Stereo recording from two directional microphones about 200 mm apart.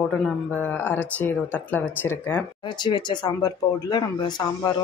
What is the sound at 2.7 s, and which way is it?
Speech, 20° left (ahead or behind).